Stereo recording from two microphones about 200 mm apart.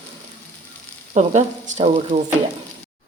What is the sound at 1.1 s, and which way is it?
Speech, 35° right (ahead or behind).